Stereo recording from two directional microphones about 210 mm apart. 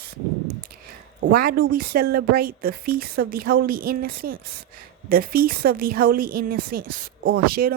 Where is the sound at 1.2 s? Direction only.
45° right (ahead or behind).